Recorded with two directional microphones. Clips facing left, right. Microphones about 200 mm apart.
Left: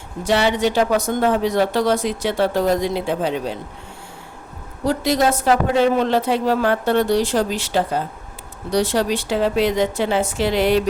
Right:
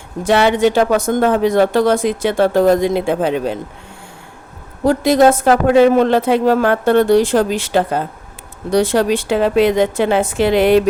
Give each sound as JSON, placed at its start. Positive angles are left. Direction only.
{"t": 0.3, "sound": "speech", "side_deg": -55}
{"t": 4.8, "sound": "a woman's voice", "side_deg": -50}